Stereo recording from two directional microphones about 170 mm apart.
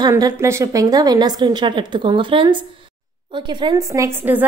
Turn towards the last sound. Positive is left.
turn(degrees=-10)  # may be behind; listen again after turning